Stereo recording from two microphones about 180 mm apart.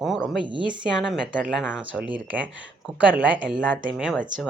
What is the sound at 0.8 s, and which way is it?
Speech, 5° right (ahead or behind).